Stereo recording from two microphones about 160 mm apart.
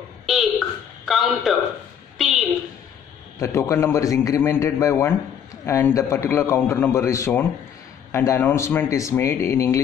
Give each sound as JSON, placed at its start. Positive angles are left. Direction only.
{"t": 1.0, "sound": "a man's voice", "side_deg": 0}
{"t": 2.1, "sound": "a sound", "side_deg": 0}
{"t": 3.3, "sound": "a man's voice", "side_deg": 20}